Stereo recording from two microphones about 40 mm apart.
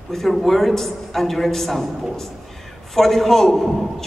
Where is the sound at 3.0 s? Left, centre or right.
Centre.